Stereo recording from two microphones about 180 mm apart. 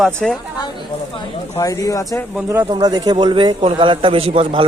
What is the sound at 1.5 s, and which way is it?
Speech, 20° left (ahead or behind).